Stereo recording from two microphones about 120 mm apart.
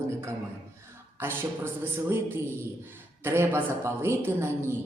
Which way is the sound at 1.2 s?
20° right (ahead or behind).